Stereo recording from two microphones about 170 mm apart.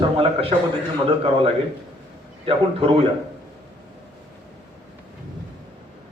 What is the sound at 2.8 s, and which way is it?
Speech, 35° right (ahead or behind).